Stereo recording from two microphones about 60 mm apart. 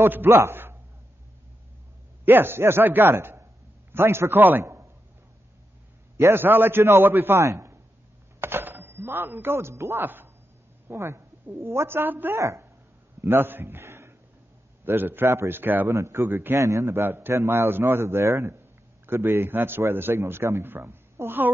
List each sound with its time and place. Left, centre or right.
0.0 s a man's voice: right
2.2 s a man's voice: right
6.1 s a man's voice: right
6.4 s a man's voice: right
10.0 s speech: right
10.9 s a man's voice: right
12.4 s speech: right
13.2 s a man's voice: right
15.2 s a man's voice: right
15.9 s a man's voice: right
16.5 s a man's voice: right
18.5 s a sound: right
19.4 s a man's voice: right